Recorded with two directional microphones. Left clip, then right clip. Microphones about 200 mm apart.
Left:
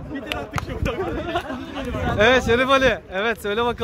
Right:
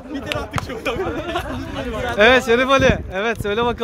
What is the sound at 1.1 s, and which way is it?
Speech, 15° left (ahead or behind).